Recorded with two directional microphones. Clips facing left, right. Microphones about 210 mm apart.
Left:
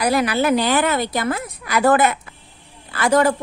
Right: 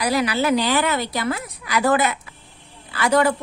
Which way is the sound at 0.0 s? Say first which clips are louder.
Left 2 dB; 50° left (ahead or behind).